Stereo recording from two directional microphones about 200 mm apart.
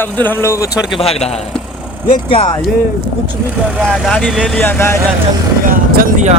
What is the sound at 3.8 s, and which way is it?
Speech, centre (ahead or behind).